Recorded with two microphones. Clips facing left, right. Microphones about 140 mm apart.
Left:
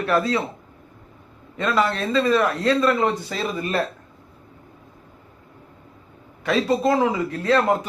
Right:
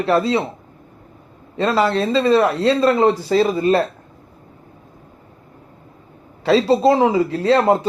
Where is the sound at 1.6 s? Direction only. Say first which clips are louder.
Right 5 dB; 30° right (ahead or behind).